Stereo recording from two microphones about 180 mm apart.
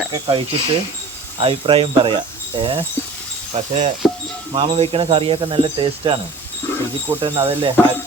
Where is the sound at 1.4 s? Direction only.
30° right (ahead or behind).